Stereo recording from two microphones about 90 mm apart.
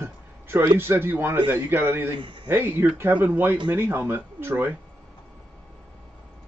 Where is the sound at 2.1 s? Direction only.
65° right (ahead or behind).